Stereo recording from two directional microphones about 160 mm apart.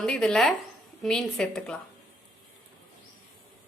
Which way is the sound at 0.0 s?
5° left (ahead or behind).